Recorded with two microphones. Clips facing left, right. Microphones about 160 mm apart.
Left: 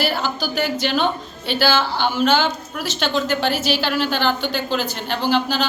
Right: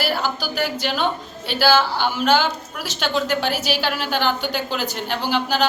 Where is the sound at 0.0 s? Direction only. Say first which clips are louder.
Left 1 dB; 10° right (ahead or behind).